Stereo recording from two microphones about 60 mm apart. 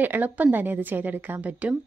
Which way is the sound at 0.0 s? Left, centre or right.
Right.